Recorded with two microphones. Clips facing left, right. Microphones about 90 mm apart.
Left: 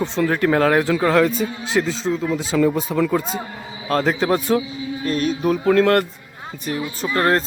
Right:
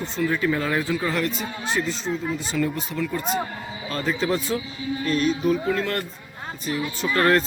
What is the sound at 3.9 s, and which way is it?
Speech, 70° left (ahead or behind).